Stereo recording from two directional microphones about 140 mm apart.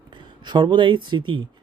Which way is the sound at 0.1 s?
35° right (ahead or behind).